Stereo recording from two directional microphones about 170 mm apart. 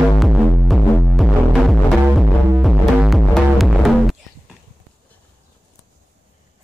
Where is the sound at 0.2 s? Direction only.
Centre (ahead or behind).